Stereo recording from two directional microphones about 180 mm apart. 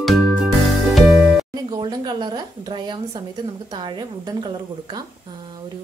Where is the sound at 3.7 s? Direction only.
25° right (ahead or behind).